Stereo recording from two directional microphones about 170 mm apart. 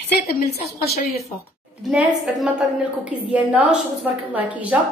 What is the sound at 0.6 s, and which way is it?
Speech, 65° left (ahead or behind).